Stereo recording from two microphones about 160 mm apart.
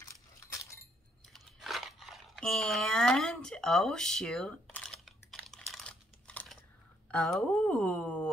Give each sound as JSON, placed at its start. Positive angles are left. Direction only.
{"t": 0.0, "sound": "glass", "side_deg": 20}
{"t": 1.3, "sound": "crumpling", "side_deg": 0}
{"t": 7.1, "sound": "speech", "side_deg": 5}